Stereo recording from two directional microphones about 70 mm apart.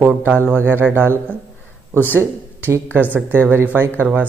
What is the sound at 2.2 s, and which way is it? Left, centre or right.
Speech, right.